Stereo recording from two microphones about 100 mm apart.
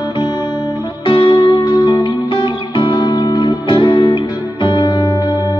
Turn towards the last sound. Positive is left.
turn(degrees=45)  # may be behind; listen again after turning